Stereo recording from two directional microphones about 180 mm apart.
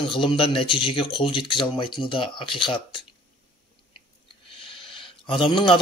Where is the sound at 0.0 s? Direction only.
30° left (ahead or behind).